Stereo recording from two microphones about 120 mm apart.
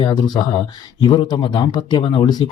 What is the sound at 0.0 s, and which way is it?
Speech, 40° left (ahead or behind).